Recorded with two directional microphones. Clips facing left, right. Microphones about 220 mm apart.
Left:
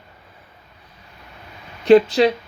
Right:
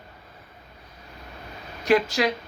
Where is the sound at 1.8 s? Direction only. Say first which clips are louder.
Left 9 dB; 30° left (ahead or behind).